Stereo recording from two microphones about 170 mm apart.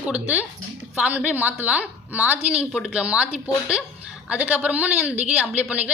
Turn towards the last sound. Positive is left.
turn(degrees=-10)  # may be behind; listen again after turning